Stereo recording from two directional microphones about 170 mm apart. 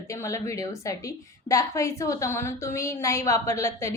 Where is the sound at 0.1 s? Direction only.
15° left (ahead or behind).